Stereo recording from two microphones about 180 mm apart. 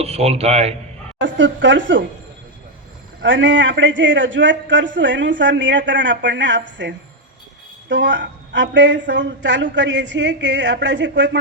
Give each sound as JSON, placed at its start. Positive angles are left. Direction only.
{"t": 0.0, "sound": "a man's voice", "side_deg": -35}
{"t": 1.2, "sound": "a man's voice", "side_deg": -90}
{"t": 3.2, "sound": "a man's voice", "side_deg": -90}